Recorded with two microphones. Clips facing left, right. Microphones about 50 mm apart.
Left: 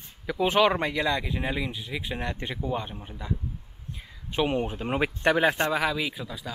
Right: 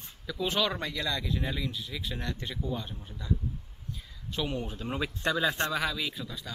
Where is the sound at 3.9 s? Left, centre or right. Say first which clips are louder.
Left 8 dB; left.